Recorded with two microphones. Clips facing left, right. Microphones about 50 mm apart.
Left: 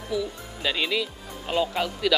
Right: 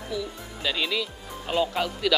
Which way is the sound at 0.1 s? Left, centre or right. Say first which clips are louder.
Left 4 dB; centre.